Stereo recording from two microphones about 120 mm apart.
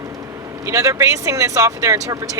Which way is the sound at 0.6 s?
25° right (ahead or behind).